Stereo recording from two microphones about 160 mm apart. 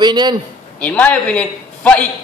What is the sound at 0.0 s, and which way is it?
Speech, 25° right (ahead or behind).